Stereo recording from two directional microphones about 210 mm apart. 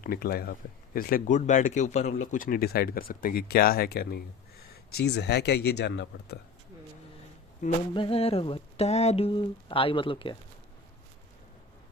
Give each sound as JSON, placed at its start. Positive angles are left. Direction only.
{"t": 0.0, "sound": "speech", "side_deg": 45}
{"t": 7.9, "sound": "speech", "side_deg": 25}